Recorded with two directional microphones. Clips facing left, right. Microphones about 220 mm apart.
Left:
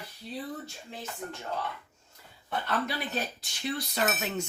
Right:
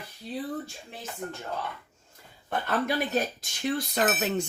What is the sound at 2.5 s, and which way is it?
Speech, 50° right (ahead or behind).